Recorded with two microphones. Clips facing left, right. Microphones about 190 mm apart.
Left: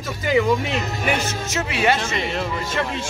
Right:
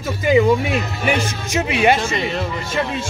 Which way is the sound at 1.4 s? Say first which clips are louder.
Right 5 dB; 15° right (ahead or behind).